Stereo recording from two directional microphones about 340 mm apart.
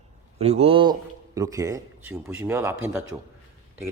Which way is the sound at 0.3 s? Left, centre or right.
Centre.